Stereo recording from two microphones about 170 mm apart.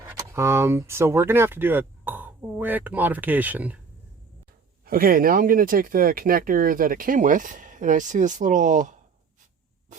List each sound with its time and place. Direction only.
0.1 s speech: 15° right (ahead or behind)
4.9 s speech: 60° right (ahead or behind)